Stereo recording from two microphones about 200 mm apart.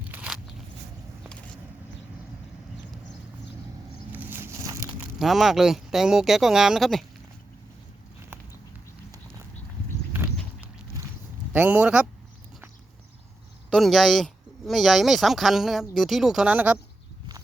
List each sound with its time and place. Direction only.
0.1 s biting: 10° right (ahead or behind)
4.1 s a sound: 10° right (ahead or behind)
5.2 s speech: centre (ahead or behind)
11.5 s speech: 10° right (ahead or behind)
13.7 s speech: centre (ahead or behind)